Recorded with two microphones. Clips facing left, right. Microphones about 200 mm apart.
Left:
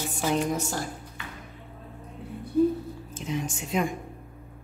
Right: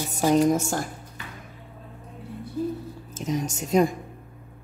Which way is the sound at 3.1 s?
40° right (ahead or behind).